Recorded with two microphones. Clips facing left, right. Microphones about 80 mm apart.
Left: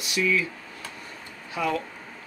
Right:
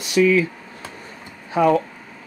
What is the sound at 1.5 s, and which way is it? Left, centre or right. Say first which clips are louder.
Speech: right 11 dB; right.